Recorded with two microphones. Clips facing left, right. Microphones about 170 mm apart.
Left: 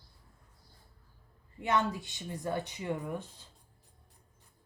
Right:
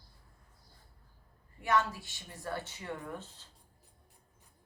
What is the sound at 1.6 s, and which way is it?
Speech, 20° left (ahead or behind).